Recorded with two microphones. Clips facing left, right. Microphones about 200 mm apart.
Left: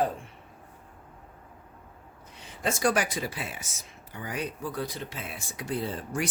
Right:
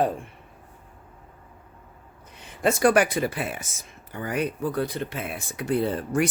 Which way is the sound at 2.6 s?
60° right (ahead or behind).